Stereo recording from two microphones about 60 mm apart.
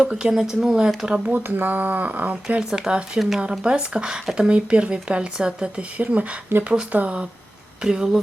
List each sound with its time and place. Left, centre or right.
0.3 s speech: centre
1.0 s speech: right
2.6 s speech: centre
3.2 s speech: centre
3.5 s speech: centre
6.5 s speech: right
6.9 s speech: right